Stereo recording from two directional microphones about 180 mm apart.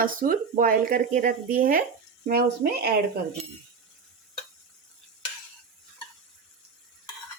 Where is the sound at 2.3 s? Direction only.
60° right (ahead or behind).